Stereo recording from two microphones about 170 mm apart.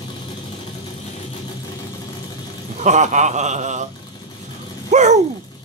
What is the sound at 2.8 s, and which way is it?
Speech, 45° right (ahead or behind).